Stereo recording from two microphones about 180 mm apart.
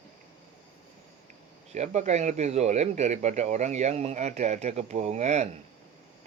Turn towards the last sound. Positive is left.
turn(degrees=-40)  # may be behind; listen again after turning